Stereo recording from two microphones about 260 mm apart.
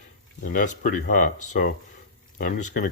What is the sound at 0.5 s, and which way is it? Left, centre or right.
Speech, left.